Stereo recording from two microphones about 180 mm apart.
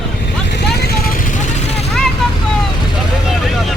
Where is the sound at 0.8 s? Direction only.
55° left (ahead or behind).